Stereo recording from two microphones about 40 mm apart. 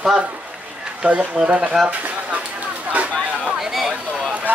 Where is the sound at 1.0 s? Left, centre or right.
Right.